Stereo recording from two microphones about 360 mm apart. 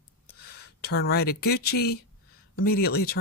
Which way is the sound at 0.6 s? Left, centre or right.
Left.